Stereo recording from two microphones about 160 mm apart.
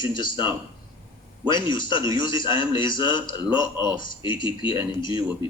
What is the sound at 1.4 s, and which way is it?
A man's voice, 30° left (ahead or behind).